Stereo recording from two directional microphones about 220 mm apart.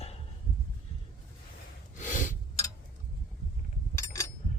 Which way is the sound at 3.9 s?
15° left (ahead or behind).